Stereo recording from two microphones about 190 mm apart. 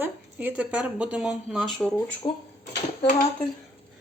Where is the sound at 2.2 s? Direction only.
25° left (ahead or behind).